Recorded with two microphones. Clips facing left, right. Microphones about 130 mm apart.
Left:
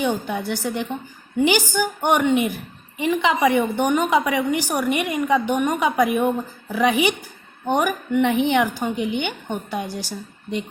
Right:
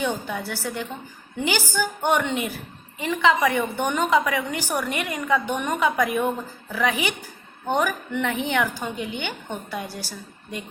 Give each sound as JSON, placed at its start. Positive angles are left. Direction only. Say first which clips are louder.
{"t": 0.0, "sound": "a woman's voice", "louder": "left 4 dB", "side_deg": 20}